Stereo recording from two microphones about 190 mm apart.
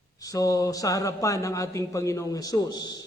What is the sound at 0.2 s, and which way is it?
A man's voice, 20° left (ahead or behind).